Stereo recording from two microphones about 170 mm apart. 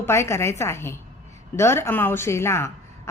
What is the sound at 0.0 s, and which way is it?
A woman's voice, 15° left (ahead or behind).